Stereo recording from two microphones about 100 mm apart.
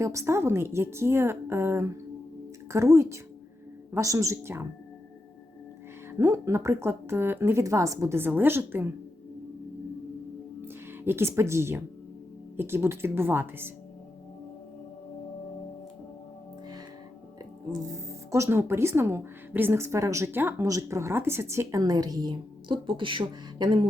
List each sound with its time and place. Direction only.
0.0 s speech: 30° right (ahead or behind)
6.1 s speech: 25° right (ahead or behind)
8.2 s speech: 20° right (ahead or behind)
11.0 s speech: 25° right (ahead or behind)
17.7 s speech: 35° right (ahead or behind)
20.7 s a woman's voice: 35° right (ahead or behind); by 23.9 s 55° right (ahead or behind)